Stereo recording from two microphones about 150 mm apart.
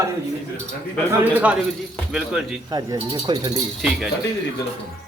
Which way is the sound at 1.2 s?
10° right (ahead or behind).